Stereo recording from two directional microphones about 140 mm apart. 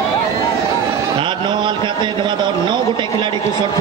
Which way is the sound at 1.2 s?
35° right (ahead or behind).